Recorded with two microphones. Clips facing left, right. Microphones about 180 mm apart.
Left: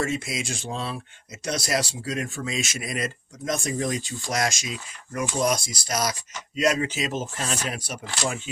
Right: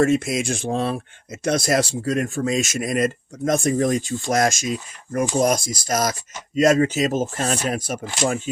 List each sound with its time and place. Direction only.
0.0 s speech: 50° right (ahead or behind)